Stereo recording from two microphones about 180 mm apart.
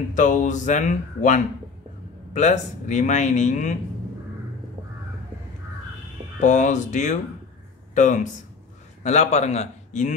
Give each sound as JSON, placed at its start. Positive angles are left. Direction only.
{"t": 0.1, "sound": "a man's voice", "side_deg": 45}
{"t": 6.4, "sound": "a man's voice", "side_deg": 40}